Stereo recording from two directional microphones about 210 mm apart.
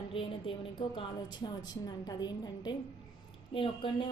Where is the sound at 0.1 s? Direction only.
25° left (ahead or behind).